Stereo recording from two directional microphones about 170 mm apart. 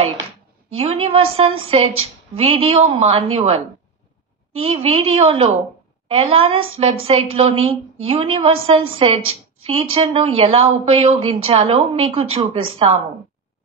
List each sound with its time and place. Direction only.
0.7 s a woman's voice: 35° right (ahead or behind)